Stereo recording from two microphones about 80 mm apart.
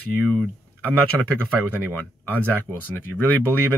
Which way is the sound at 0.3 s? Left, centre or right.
Centre.